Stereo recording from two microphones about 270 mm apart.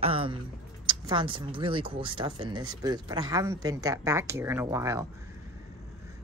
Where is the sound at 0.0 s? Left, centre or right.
Centre.